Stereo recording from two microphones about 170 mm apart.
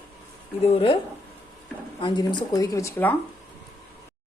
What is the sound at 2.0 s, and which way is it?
Speech, 25° left (ahead or behind).